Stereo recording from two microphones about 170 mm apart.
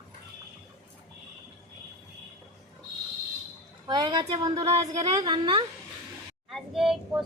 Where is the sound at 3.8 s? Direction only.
25° right (ahead or behind).